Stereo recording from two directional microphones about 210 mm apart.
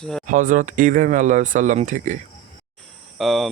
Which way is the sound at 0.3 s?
40° right (ahead or behind).